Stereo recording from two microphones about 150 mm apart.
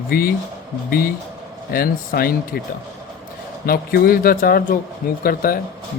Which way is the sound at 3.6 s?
90° left.